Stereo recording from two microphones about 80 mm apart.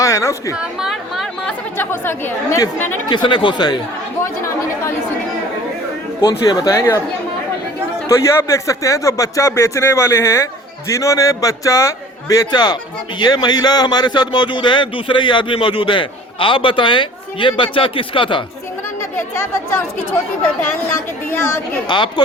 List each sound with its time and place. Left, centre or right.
0.0 s a woman's voice: left
0.5 s chatter: centre
1.8 s speech: left
3.1 s speech: left
6.2 s speech: left
6.7 s speech: left
8.0 s speech: left
12.5 s speech: left
21.2 s speech: left
21.8 s speech: left